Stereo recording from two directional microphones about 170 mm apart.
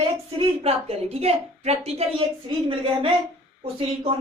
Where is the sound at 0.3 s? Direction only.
35° right (ahead or behind).